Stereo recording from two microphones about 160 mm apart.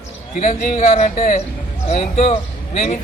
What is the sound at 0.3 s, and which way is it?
Speech, 50° left (ahead or behind).